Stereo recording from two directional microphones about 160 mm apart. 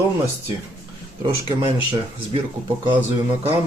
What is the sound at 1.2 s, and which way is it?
Speech, 30° right (ahead or behind).